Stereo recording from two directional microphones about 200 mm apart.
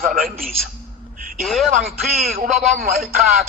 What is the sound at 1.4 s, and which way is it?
Speech, centre (ahead or behind).